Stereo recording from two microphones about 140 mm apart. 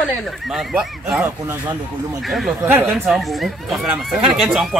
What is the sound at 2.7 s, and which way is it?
Speech, 10° right (ahead or behind).